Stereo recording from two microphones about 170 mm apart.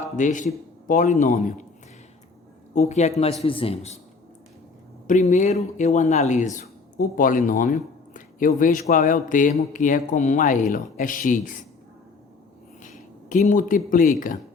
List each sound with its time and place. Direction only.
0.2 s speech: 45° left (ahead or behind)
2.7 s speech: 40° left (ahead or behind)
5.0 s speech: 45° left (ahead or behind)
12.8 s speech: 50° left (ahead or behind)